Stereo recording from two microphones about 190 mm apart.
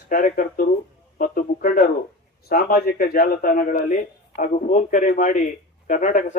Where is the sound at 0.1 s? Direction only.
45° left (ahead or behind).